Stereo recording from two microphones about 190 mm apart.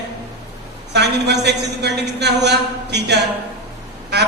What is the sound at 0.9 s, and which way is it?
A man's voice, 60° right (ahead or behind).